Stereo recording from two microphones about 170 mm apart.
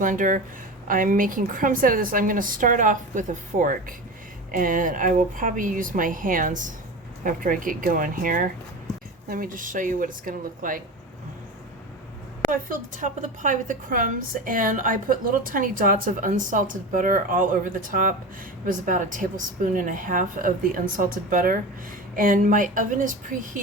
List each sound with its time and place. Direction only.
0.0 s a woman's voice: 50° right (ahead or behind)
12.5 s a woman's voice: 50° right (ahead or behind)